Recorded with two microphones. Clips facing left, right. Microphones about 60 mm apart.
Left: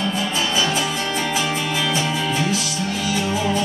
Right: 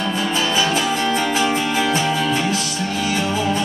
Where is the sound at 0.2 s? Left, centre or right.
Right.